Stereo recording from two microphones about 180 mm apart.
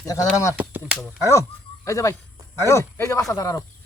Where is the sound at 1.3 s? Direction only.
15° left (ahead or behind).